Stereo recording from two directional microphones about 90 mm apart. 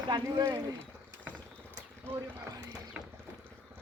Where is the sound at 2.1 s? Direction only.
15° left (ahead or behind).